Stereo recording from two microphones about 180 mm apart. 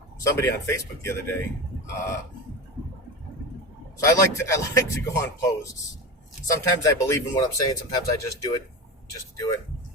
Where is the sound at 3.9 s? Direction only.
15° left (ahead or behind).